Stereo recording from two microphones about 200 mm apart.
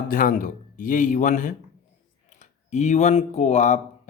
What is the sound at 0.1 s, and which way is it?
Speech, 45° left (ahead or behind).